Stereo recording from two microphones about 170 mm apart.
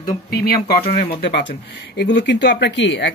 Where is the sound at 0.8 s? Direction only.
40° left (ahead or behind).